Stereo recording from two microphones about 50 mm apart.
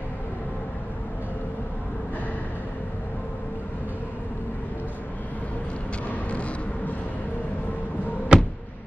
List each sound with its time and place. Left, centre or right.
8.3 s music: centre